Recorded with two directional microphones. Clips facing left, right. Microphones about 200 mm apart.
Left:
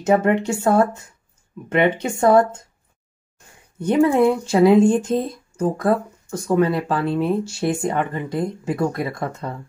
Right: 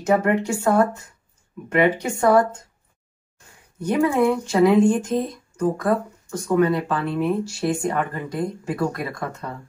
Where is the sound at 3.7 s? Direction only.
25° left (ahead or behind).